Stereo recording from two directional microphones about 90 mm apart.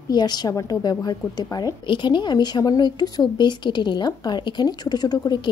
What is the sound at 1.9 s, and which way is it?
A woman's voice, 60° left (ahead or behind).